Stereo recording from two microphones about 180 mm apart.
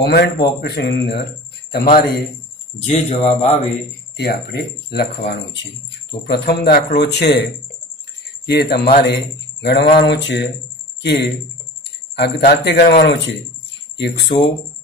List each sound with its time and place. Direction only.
0.0 s speech: 70° left (ahead or behind)
1.7 s speech: 55° left (ahead or behind)
2.9 s a man's voice: 35° left (ahead or behind)
4.2 s speech: 60° left (ahead or behind)
8.5 s speech: 60° left (ahead or behind)
13.0 s speech: 90° left
13.9 s speech: 75° left (ahead or behind)